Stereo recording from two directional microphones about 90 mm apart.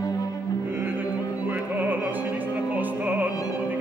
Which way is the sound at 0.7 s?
20° right (ahead or behind).